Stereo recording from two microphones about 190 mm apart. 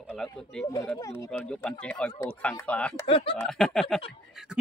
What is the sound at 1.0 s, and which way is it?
Speech, 15° left (ahead or behind).